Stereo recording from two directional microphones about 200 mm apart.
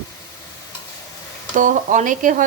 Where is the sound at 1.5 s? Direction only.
40° right (ahead or behind).